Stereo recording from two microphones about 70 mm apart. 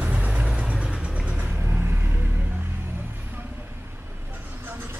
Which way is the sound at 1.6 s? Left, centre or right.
Right.